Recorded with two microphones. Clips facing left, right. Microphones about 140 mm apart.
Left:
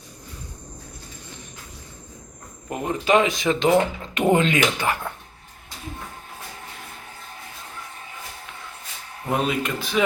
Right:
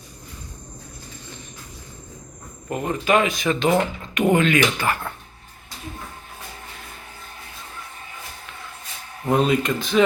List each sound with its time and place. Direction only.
2.6 s speech: 15° left (ahead or behind)
9.3 s speech: 5° left (ahead or behind)